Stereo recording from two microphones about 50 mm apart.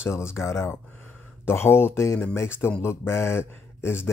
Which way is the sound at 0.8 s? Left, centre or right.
Left.